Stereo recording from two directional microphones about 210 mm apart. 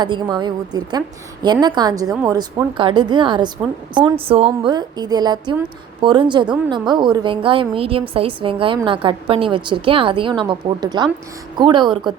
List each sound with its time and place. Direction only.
0.0 s a woman's voice: 20° right (ahead or behind)
4.3 s a woman's voice: 30° right (ahead or behind)